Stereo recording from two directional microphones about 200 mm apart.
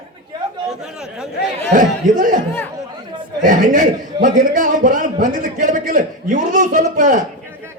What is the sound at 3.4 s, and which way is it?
A man's voice, 40° right (ahead or behind).